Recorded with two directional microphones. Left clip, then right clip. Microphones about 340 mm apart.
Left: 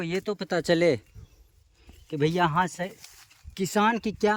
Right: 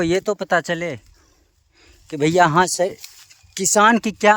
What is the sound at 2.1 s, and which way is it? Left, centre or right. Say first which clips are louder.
Speech: right 9 dB; centre.